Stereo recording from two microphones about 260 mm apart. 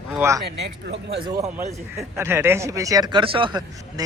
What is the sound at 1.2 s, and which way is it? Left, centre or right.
Speech, centre.